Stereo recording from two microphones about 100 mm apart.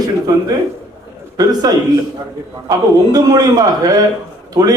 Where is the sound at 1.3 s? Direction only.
40° right (ahead or behind).